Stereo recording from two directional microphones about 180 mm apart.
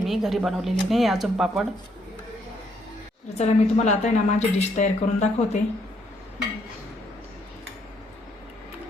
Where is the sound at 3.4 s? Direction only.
40° left (ahead or behind).